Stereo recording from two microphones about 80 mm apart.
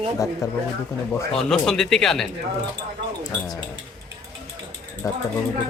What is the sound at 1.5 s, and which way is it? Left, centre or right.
Speech, centre.